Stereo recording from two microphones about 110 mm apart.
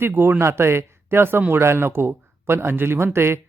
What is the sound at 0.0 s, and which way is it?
Speech, 20° right (ahead or behind).